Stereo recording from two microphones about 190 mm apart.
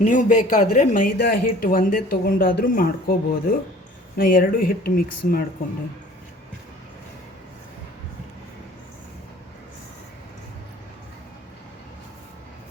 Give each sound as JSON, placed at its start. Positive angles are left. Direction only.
{"t": 0.0, "sound": "speech", "side_deg": 40}